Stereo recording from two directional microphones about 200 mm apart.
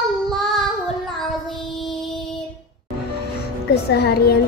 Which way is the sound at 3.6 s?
55° left (ahead or behind).